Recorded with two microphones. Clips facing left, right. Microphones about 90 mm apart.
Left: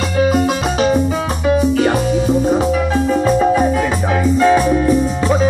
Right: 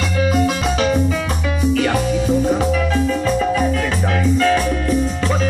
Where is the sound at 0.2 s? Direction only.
35° left (ahead or behind).